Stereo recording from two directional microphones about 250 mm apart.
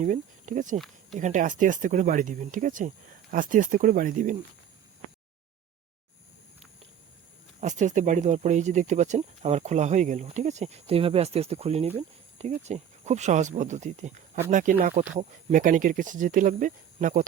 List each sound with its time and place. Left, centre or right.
0.0 s speech: right
7.6 s speech: right